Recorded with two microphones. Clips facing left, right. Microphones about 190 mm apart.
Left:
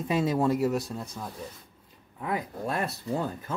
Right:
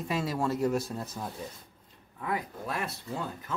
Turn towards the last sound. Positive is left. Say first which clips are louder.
# left 5 dB
turn(degrees=35)  # may be behind; listen again after turning